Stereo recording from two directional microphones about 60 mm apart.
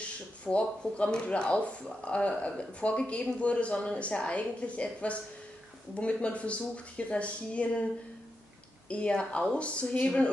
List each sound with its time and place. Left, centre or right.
0.5 s speech: centre
8.8 s speech: centre